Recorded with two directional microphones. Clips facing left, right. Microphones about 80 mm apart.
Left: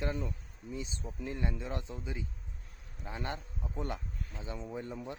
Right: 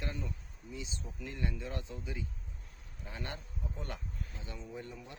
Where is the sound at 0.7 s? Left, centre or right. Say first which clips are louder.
Left 4 dB; left.